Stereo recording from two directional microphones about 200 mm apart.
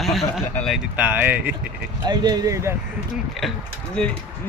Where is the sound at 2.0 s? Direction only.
20° right (ahead or behind).